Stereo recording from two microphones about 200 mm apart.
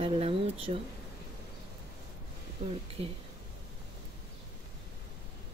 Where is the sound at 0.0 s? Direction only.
30° right (ahead or behind).